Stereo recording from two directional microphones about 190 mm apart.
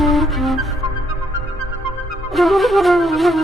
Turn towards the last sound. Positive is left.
turn(degrees=0)  # may be behind; listen again after turning